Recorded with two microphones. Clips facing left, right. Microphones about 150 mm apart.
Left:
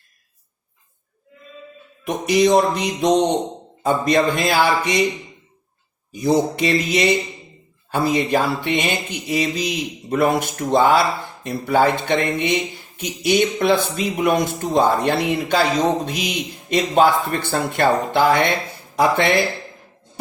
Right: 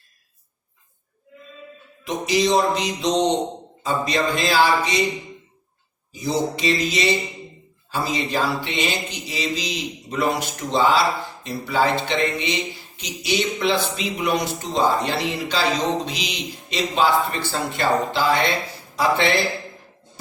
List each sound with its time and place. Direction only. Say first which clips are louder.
2.0 s mantra: left 4 dB; 55° left (ahead or behind)
6.1 s mantra: left 5 dB; 55° left (ahead or behind)
11.4 s speech: left 4 dB; 55° left (ahead or behind)
16.0 s mantra: left 4 dB; 55° left (ahead or behind)